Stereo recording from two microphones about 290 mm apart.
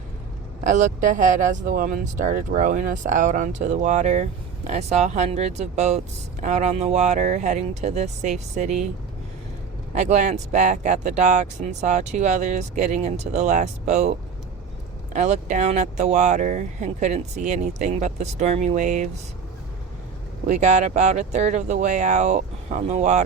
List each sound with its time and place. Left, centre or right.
0.6 s speech: right
9.9 s speech: right
15.1 s speech: right
20.5 s speech: right